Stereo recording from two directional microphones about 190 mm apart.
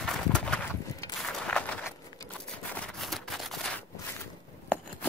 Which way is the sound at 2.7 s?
5° left (ahead or behind).